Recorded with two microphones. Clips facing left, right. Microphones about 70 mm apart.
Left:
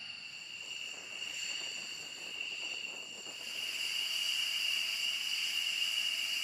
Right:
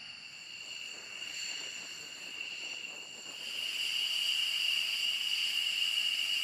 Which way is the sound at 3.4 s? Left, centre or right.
Centre.